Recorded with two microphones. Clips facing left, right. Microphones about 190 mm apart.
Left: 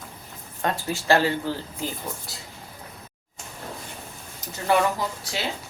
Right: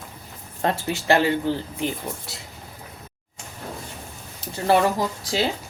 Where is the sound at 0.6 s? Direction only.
25° right (ahead or behind).